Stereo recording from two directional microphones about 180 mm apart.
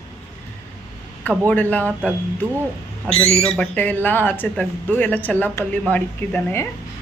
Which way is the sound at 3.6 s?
10° left (ahead or behind).